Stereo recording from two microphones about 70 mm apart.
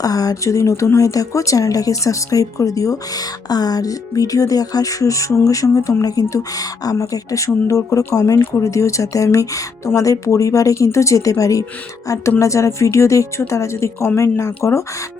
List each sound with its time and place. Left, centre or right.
0.0 s speech: left